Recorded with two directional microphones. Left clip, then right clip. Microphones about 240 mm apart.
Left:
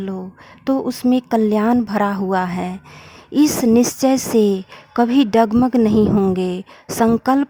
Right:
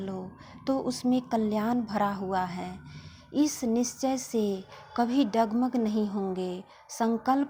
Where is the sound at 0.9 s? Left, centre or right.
Left.